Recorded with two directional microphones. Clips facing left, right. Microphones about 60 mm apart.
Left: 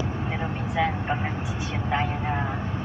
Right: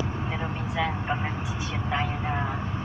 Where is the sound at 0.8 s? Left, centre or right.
Centre.